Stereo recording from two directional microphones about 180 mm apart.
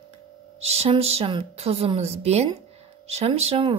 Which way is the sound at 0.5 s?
35° right (ahead or behind).